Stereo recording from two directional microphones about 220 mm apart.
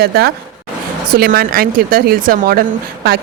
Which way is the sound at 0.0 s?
45° right (ahead or behind).